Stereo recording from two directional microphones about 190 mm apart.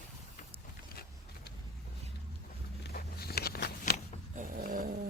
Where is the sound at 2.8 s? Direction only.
55° left (ahead or behind).